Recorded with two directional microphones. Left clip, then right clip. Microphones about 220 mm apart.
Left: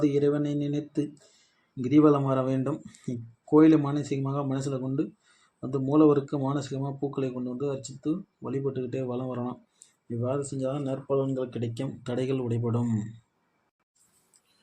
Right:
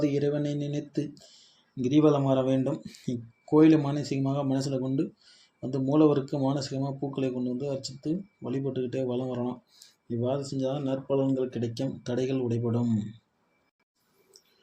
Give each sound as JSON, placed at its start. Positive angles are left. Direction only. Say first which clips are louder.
{"t": 0.0, "sound": "speech", "louder": "left 2 dB", "side_deg": 20}